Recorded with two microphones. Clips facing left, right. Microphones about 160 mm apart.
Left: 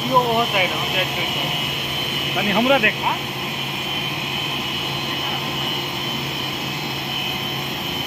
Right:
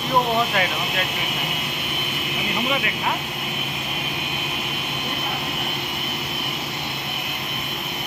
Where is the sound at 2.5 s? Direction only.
75° left (ahead or behind).